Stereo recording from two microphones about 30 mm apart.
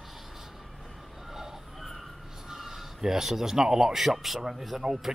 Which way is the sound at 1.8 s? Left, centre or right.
Centre.